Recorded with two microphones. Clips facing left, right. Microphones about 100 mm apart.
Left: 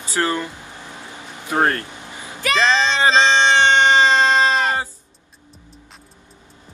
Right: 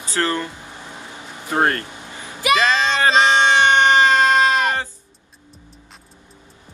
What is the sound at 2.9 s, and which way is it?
Music, 25° left (ahead or behind).